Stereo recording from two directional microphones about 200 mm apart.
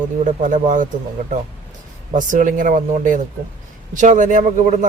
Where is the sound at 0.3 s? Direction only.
40° right (ahead or behind).